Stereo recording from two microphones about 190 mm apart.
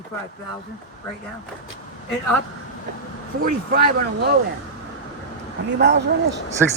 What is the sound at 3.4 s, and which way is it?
Speech, 50° right (ahead or behind).